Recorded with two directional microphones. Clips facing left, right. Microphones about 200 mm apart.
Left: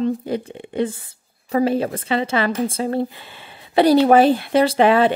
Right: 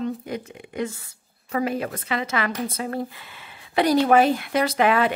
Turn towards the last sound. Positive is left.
turn(degrees=30)  # may be behind; listen again after turning